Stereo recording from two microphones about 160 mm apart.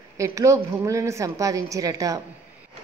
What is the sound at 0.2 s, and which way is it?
A woman's voice, 20° right (ahead or behind).